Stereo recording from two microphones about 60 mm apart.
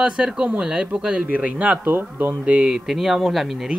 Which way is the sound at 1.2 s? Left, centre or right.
Right.